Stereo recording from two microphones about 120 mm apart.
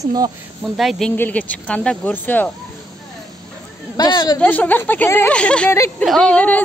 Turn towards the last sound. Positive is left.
turn(degrees=10)  # may be behind; listen again after turning